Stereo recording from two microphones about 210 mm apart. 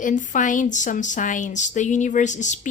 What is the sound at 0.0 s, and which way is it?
A woman's voice, 35° left (ahead or behind).